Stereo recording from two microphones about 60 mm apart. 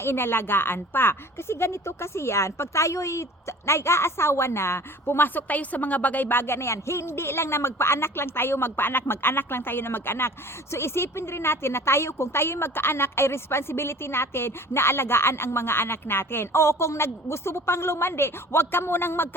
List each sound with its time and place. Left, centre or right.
0.0 s speech: left